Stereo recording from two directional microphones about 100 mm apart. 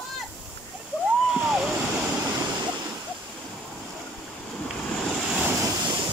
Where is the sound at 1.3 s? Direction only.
5° right (ahead or behind).